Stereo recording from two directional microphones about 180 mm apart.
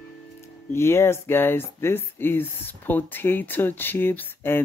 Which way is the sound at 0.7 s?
15° left (ahead or behind).